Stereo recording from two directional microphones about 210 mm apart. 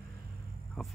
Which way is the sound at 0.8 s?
Centre (ahead or behind).